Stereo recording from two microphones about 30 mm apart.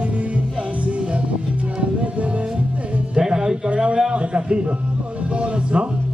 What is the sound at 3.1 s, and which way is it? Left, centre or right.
Music, right.